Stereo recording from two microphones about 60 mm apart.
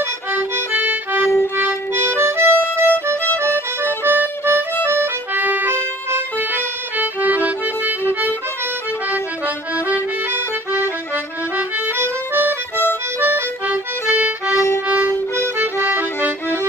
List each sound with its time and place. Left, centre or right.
0.3 s music: right
1.6 s music: right
4.0 s music: right
12.0 s music: right
13.7 s accordion: right
14.9 s violin: right
15.3 s music: right
15.8 s music: right